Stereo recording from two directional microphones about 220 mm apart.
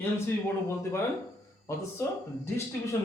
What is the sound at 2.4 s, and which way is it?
Speech, 10° left (ahead or behind).